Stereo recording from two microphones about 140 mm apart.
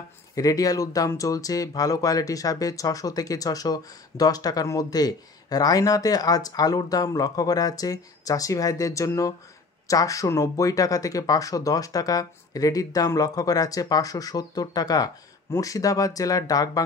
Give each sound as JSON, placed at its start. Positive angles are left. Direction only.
{"t": 0.4, "sound": "speech", "side_deg": 25}